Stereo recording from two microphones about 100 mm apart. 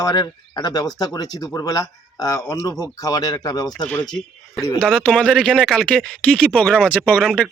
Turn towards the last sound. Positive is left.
turn(degrees=5)  # may be behind; listen again after turning